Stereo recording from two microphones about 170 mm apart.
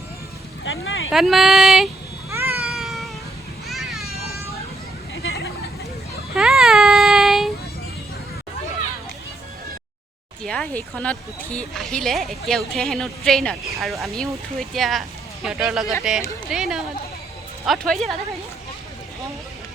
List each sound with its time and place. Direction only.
0.6 s vehicle: 90° left
1.1 s speech: centre (ahead or behind)
2.3 s cat: 10° right (ahead or behind)
3.7 s a sound: centre (ahead or behind)
6.3 s a sound: 5° right (ahead or behind)
10.4 s speech: 5° left (ahead or behind)